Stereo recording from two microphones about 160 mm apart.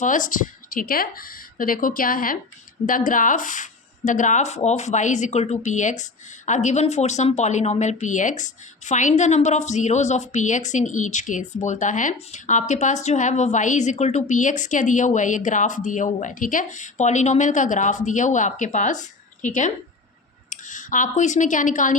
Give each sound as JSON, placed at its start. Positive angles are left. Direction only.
{"t": 0.0, "sound": "a woman's voice", "side_deg": 55}